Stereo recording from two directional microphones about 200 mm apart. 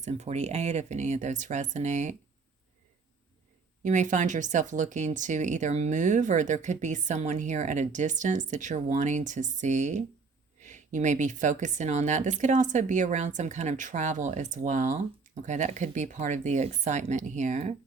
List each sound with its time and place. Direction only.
0.0 s speech: 35° right (ahead or behind)
3.8 s speech: 35° right (ahead or behind)